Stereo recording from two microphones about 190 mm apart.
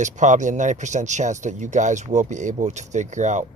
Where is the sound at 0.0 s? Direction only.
40° right (ahead or behind).